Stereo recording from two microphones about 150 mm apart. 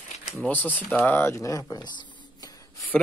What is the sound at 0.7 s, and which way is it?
Speech, 10° left (ahead or behind).